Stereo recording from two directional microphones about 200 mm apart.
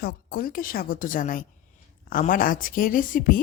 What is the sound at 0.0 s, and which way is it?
Speech, 50° left (ahead or behind).